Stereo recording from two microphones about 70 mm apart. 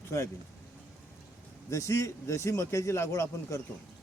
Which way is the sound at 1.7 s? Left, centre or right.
Left.